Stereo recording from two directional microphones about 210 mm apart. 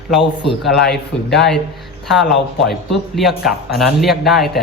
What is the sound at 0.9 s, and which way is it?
Speech, centre (ahead or behind).